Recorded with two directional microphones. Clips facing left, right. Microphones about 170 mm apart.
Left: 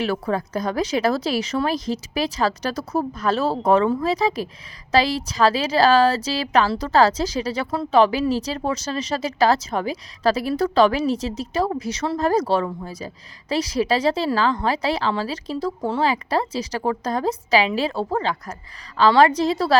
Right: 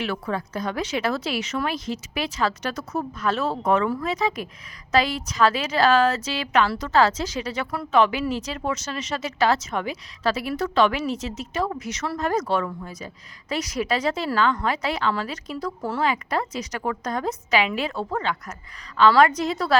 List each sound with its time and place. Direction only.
0.0 s a woman's voice: 35° left (ahead or behind)